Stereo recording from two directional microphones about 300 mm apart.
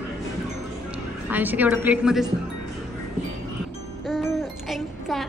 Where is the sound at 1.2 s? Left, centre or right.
Centre.